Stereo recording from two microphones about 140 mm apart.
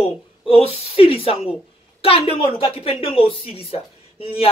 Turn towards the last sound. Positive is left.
turn(degrees=45)  # may be behind; listen again after turning